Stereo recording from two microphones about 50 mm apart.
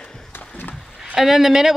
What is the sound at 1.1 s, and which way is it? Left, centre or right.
Speech, centre.